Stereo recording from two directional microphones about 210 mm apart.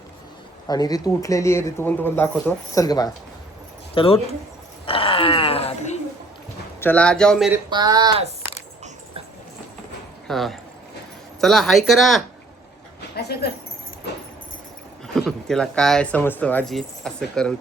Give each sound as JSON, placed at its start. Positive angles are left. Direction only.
{"t": 0.7, "sound": "speech", "side_deg": 20}
{"t": 6.7, "sound": "speech", "side_deg": 10}
{"t": 7.7, "sound": "speech", "side_deg": -20}
{"t": 10.2, "sound": "speech", "side_deg": 0}
{"t": 13.1, "sound": "speech", "side_deg": 50}
{"t": 15.0, "sound": "speech", "side_deg": 0}